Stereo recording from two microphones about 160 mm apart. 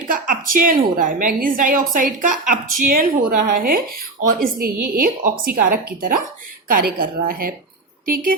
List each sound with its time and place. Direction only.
0.1 s a woman's voice: 60° right (ahead or behind)